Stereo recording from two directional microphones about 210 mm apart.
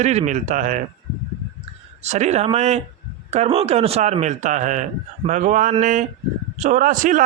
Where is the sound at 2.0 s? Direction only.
35° right (ahead or behind).